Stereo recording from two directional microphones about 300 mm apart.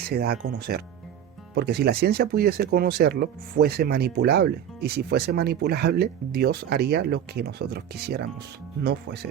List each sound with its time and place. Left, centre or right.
0.1 s speech: right